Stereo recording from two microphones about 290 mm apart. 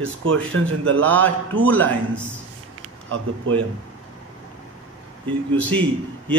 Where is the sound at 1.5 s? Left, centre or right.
Centre.